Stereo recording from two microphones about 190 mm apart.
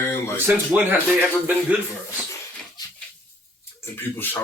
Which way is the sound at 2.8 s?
20° left (ahead or behind).